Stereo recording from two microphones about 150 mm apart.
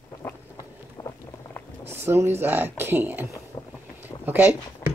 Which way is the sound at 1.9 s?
15° right (ahead or behind).